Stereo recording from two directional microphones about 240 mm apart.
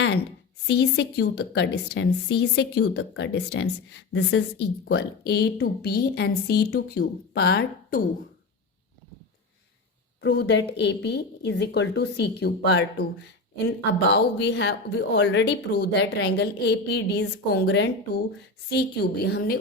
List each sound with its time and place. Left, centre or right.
0.7 s a woman's voice: left
10.2 s a woman's voice: left
14.1 s a woman's voice: left